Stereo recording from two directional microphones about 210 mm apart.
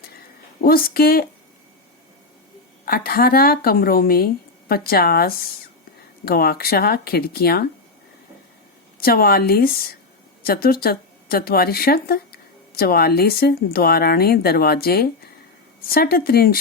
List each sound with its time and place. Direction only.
0.6 s speech: 45° left (ahead or behind)
2.8 s speech: 45° left (ahead or behind)
9.0 s speech: 45° left (ahead or behind)